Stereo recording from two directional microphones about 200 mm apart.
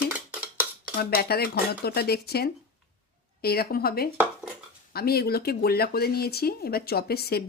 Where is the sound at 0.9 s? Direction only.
50° left (ahead or behind).